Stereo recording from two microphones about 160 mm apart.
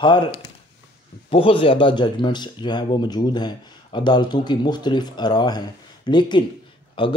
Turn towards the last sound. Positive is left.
turn(degrees=30)  # may be behind; listen again after turning